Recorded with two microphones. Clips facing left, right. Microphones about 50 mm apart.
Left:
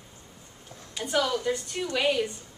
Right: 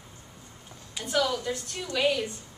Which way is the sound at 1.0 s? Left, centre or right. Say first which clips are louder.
Left 1 dB; centre.